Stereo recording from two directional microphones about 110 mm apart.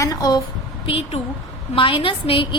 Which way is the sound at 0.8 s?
60° left (ahead or behind).